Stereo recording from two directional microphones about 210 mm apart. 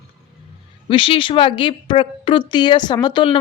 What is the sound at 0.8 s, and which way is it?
A woman's voice, 25° left (ahead or behind).